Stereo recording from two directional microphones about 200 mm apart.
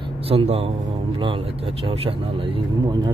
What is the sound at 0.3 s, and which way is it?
Speech, 30° right (ahead or behind).